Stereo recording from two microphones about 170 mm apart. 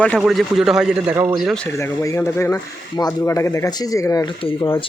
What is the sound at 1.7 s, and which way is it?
Speech, 15° left (ahead or behind).